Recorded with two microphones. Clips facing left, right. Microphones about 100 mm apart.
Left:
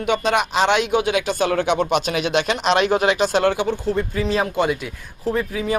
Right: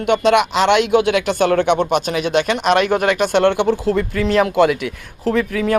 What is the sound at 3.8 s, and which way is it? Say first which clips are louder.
Speech: right 4 dB; 90° right.